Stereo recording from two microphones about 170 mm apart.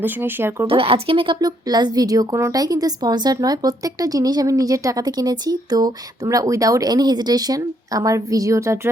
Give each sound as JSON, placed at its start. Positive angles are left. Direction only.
{"t": 0.0, "sound": "speech", "side_deg": -10}
{"t": 0.7, "sound": "a woman's voice", "side_deg": -35}